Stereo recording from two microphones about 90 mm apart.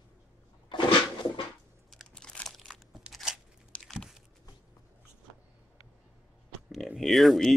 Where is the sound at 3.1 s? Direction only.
5° right (ahead or behind).